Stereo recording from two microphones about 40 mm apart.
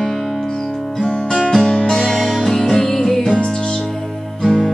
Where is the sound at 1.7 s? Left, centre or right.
Centre.